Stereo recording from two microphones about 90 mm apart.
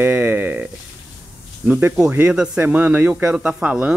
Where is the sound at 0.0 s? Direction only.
20° right (ahead or behind).